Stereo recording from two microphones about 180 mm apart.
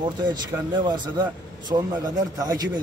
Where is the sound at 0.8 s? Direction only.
25° right (ahead or behind).